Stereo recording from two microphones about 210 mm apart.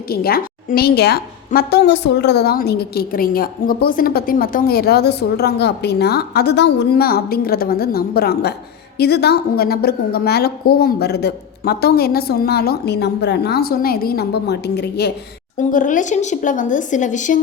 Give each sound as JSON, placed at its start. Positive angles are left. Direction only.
{"t": 0.1, "sound": "a woman's voice", "side_deg": 45}
{"t": 15.5, "sound": "speech", "side_deg": 40}